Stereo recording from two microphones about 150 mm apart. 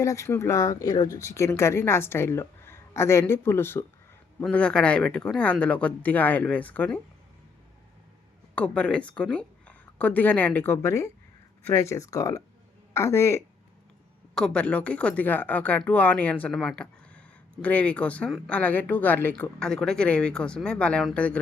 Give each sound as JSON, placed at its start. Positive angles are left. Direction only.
{"t": 0.0, "sound": "speech", "side_deg": 20}
{"t": 8.5, "sound": "a woman's voice", "side_deg": 10}
{"t": 14.3, "sound": "speech", "side_deg": 5}